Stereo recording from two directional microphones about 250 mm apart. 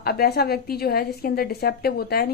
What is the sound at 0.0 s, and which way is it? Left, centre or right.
A woman's voice, left.